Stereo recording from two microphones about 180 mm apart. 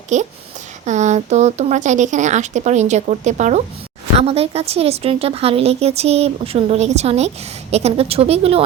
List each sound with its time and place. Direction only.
0.1 s a woman's voice: 40° right (ahead or behind)